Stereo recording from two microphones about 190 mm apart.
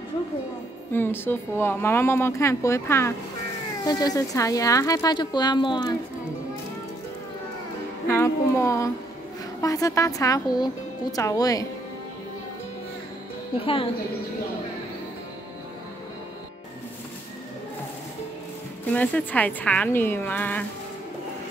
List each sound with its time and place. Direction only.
0.9 s a woman's voice: 10° left (ahead or behind)
8.1 s a sound: 15° left (ahead or behind)
9.6 s speech: 15° left (ahead or behind)
13.6 s a woman's voice: 30° left (ahead or behind)
18.9 s speech: 10° left (ahead or behind)